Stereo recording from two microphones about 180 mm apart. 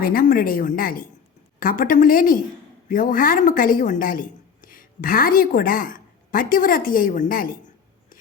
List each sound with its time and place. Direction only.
0.0 s a woman's voice: 55° left (ahead or behind)